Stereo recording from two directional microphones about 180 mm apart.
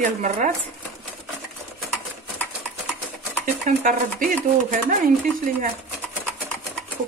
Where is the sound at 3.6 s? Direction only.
45° right (ahead or behind).